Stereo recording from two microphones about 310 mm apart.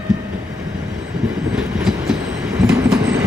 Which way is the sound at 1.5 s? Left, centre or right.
Centre.